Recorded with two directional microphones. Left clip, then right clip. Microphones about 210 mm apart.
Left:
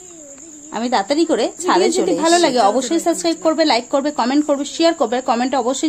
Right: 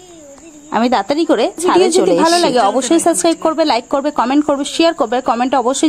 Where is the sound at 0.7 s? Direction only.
30° right (ahead or behind).